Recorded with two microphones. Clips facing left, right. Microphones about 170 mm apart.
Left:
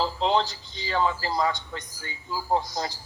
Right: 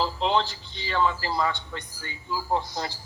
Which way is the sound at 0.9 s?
40° left (ahead or behind).